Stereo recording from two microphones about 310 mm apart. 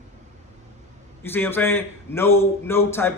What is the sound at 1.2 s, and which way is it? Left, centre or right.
A man's voice, centre.